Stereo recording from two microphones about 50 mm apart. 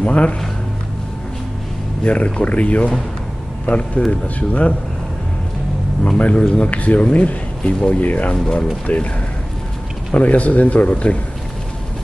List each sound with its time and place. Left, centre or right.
0.0 s speech: left
2.0 s speech: left
6.0 s speech: left
10.1 s speech: left